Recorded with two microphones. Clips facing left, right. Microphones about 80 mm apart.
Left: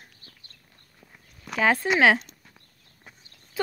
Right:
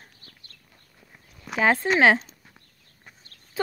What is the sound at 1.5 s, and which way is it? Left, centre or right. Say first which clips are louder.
Speech: right 1 dB; centre.